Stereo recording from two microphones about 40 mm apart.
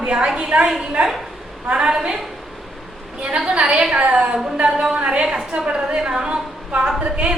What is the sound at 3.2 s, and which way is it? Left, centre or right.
A woman's voice, right.